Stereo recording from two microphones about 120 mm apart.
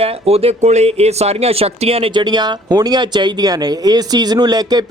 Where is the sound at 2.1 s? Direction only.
35° right (ahead or behind).